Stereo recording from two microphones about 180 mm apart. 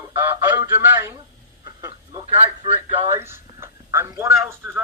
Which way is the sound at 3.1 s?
15° right (ahead or behind).